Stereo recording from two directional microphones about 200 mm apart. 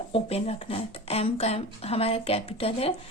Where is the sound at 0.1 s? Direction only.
30° left (ahead or behind).